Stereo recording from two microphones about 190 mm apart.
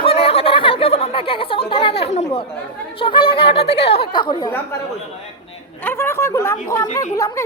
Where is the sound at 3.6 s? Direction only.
60° left (ahead or behind).